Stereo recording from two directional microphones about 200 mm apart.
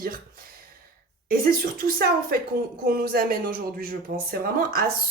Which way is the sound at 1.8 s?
50° right (ahead or behind).